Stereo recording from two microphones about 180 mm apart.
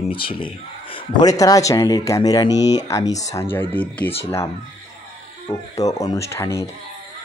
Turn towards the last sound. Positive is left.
turn(degrees=15)  # may be behind; listen again after turning